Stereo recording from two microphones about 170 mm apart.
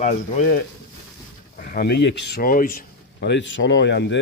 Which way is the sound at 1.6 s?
65° left (ahead or behind).